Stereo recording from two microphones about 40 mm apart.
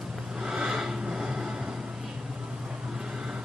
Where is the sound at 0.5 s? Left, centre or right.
Centre.